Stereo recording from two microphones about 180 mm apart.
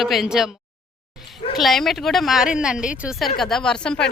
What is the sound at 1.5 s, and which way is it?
Speech, centre (ahead or behind).